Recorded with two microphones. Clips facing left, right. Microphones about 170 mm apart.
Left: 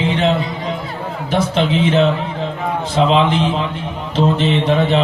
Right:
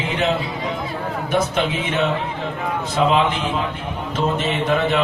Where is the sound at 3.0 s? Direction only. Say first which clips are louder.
Left 4 dB; 30° left (ahead or behind).